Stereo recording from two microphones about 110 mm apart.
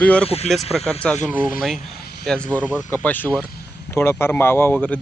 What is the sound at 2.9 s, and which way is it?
Speech, 15° left (ahead or behind).